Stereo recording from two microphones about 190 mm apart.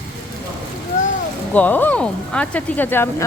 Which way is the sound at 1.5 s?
10° left (ahead or behind).